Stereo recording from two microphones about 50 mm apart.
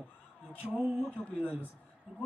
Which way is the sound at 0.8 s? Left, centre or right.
Centre.